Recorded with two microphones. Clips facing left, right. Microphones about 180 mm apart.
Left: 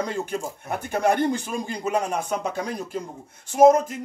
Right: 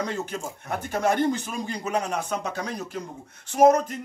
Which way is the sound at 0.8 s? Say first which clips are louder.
Left 2 dB; 10° left (ahead or behind).